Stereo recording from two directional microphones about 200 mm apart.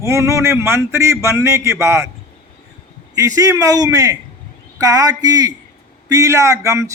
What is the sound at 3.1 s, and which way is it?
Speech, 15° right (ahead or behind).